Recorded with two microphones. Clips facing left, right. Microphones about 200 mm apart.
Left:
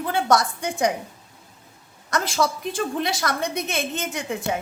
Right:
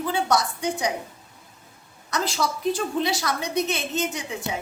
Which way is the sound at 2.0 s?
50° left (ahead or behind).